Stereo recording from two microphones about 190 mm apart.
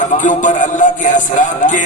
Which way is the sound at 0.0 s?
40° left (ahead or behind).